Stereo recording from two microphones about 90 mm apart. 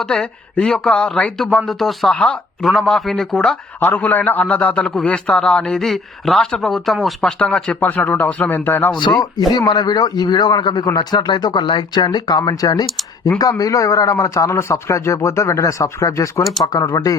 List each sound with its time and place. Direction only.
0.0 s speech: 5° left (ahead or behind)
2.1 s speech: 10° left (ahead or behind)
3.8 s speech: 20° left (ahead or behind)
9.6 s speech: 50° left (ahead or behind); by 16.4 s 35° left (ahead or behind)
16.4 s speech: centre (ahead or behind)
16.7 s speech: 40° left (ahead or behind)